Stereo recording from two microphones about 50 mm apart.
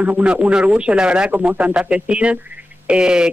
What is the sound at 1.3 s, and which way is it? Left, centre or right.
A man's voice, right.